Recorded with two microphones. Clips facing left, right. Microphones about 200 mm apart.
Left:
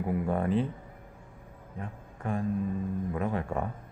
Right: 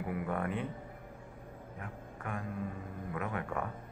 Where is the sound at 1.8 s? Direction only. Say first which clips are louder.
Left 7 dB; 30° left (ahead or behind).